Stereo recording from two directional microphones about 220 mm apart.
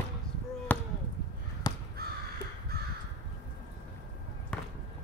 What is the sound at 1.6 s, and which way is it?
Crow, 20° left (ahead or behind).